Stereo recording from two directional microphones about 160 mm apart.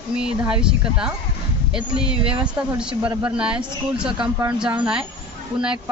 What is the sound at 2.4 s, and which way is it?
A woman's voice, 5° right (ahead or behind).